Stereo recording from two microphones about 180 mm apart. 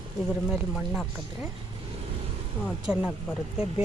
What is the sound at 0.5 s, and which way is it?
Speech, centre (ahead or behind).